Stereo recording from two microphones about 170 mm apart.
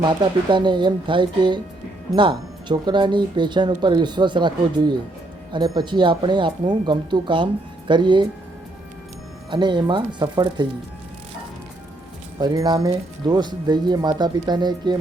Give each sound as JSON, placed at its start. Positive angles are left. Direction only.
{"t": 0.2, "sound": "speech", "side_deg": -25}
{"t": 9.5, "sound": "speech", "side_deg": -25}
{"t": 12.4, "sound": "speech", "side_deg": -25}